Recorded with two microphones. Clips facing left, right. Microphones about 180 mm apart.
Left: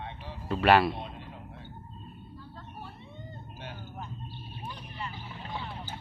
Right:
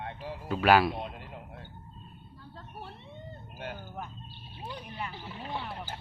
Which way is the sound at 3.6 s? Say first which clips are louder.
Right 4 dB; 55° right (ahead or behind).